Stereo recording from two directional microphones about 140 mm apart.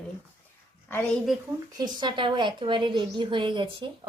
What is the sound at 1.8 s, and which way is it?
A woman's voice, 30° right (ahead or behind).